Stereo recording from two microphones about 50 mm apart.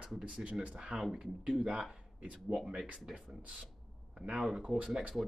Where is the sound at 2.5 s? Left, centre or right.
Centre.